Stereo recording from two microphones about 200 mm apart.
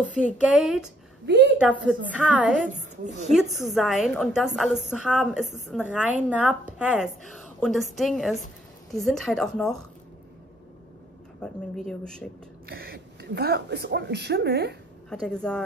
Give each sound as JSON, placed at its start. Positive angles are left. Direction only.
{"t": 0.4, "sound": "speech", "side_deg": -5}
{"t": 1.2, "sound": "a woman's voice", "side_deg": -60}
{"t": 1.6, "sound": "a woman's voice", "side_deg": -5}
{"t": 11.4, "sound": "speech", "side_deg": 5}
{"t": 12.6, "sound": "a woman's voice", "side_deg": -50}
{"t": 15.0, "sound": "speech", "side_deg": 5}